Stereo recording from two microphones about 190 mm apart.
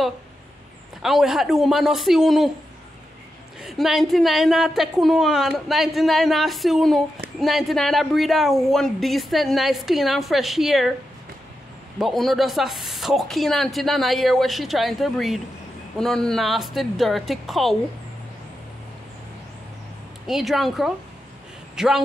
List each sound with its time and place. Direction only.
1.0 s a woman's voice: centre (ahead or behind)
3.6 s a woman's voice: centre (ahead or behind)
12.0 s a woman's voice: centre (ahead or behind)
20.2 s a woman's voice: centre (ahead or behind)